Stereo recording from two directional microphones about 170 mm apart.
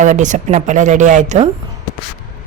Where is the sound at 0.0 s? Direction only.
50° right (ahead or behind).